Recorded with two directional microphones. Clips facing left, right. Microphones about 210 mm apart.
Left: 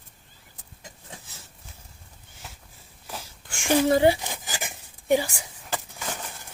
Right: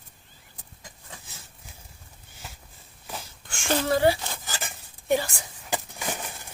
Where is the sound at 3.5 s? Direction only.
15° left (ahead or behind).